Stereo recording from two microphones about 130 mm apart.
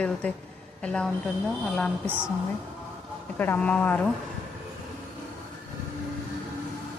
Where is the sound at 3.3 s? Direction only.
15° left (ahead or behind).